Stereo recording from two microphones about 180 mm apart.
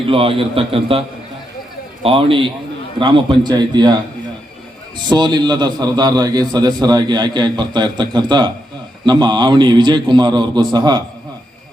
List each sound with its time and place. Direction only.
0.0 s a man's voice: 30° right (ahead or behind)
5.0 s a man's voice: 25° right (ahead or behind)